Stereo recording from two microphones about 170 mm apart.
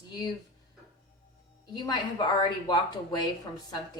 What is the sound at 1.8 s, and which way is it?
Speech, 25° left (ahead or behind).